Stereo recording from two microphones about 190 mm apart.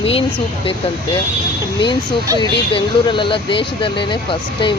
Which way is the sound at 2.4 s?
25° left (ahead or behind).